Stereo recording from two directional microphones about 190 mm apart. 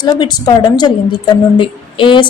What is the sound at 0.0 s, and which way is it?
A woman's voice, 20° left (ahead or behind).